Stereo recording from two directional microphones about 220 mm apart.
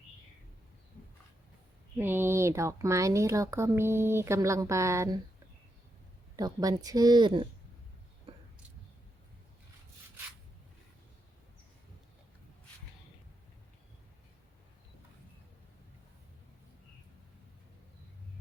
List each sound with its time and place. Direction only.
2.0 s speech: 10° right (ahead or behind)
6.3 s speech: 15° right (ahead or behind)